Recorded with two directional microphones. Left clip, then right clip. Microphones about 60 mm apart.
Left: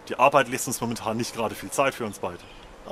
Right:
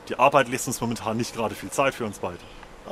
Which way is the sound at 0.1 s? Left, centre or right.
Centre.